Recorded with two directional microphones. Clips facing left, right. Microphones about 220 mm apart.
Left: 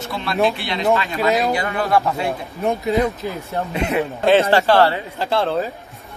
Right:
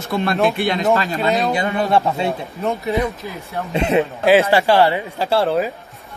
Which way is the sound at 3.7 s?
25° right (ahead or behind).